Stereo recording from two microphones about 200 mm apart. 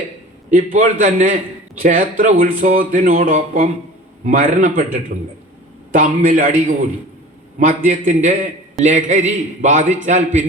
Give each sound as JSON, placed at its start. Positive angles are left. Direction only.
{"t": 0.5, "sound": "a man's voice", "side_deg": -40}
{"t": 1.8, "sound": "music", "side_deg": -40}
{"t": 4.2, "sound": "a man's voice", "side_deg": -40}
{"t": 5.9, "sound": "music", "side_deg": -40}
{"t": 7.7, "sound": "a man's voice", "side_deg": -40}